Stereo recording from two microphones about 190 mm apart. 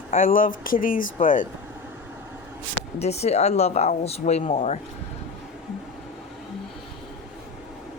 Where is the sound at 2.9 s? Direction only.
35° left (ahead or behind).